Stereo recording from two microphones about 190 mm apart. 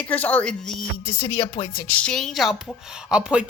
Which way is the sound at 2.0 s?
5° left (ahead or behind).